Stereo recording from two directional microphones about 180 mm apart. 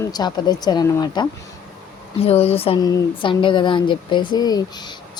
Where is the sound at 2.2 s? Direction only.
35° left (ahead or behind).